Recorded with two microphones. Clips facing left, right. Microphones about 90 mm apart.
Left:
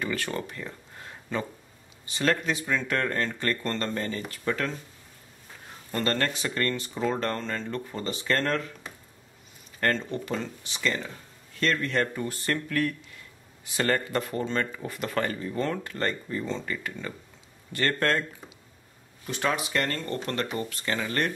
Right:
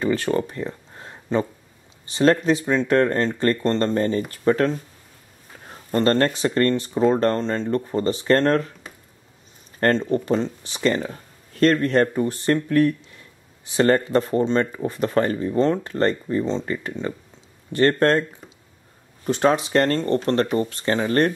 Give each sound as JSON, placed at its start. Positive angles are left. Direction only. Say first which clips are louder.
{"t": 0.0, "sound": "a sound", "louder": "right 9 dB", "side_deg": -30}
{"t": 2.0, "sound": "speech", "louder": "right 9 dB", "side_deg": -30}
{"t": 9.8, "sound": "speech", "louder": "right 8 dB", "side_deg": -35}
{"t": 19.2, "sound": "speech", "louder": "right 9 dB", "side_deg": -30}